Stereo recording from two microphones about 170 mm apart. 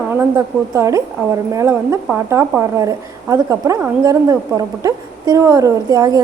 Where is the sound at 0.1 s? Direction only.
15° right (ahead or behind).